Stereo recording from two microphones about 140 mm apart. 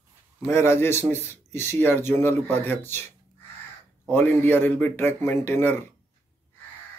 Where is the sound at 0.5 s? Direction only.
15° left (ahead or behind).